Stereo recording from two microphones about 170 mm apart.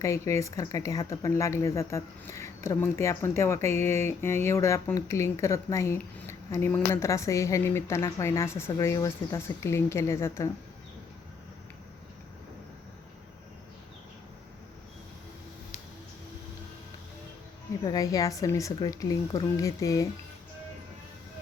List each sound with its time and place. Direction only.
0.0 s speech: 15° left (ahead or behind)
17.8 s speech: 20° left (ahead or behind)